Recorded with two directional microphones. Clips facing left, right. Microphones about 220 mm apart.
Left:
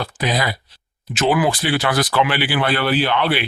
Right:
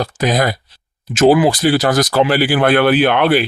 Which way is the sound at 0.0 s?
45° right (ahead or behind).